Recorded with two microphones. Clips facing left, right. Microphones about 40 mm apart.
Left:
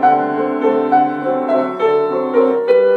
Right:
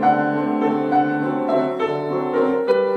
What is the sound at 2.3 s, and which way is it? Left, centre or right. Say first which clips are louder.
Music: left 6 dB; centre.